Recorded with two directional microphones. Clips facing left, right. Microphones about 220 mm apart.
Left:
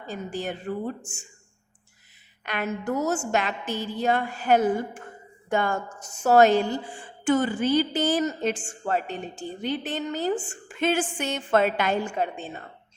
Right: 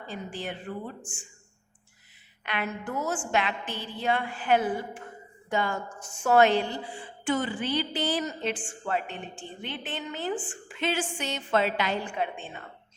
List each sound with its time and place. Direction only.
0.1 s a woman's voice: 45° left (ahead or behind)
2.4 s a woman's voice: 45° left (ahead or behind)